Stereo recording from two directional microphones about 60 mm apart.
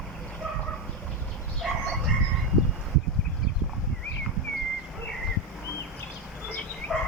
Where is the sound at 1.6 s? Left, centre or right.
Centre.